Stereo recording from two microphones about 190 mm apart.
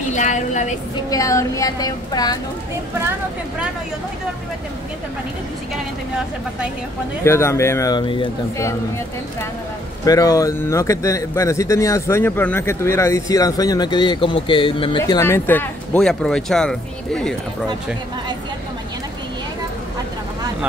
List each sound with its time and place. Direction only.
0.1 s a woman's voice: 40° left (ahead or behind)
1.1 s speech: 15° left (ahead or behind)
7.2 s speech: 15° left (ahead or behind)
10.0 s speech: 20° left (ahead or behind)